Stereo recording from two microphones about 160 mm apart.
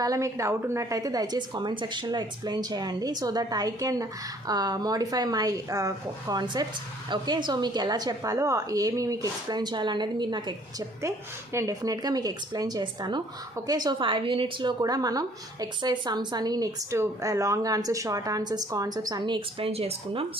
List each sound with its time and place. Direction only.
0.0 s speech: 20° right (ahead or behind); by 20.2 s 35° right (ahead or behind)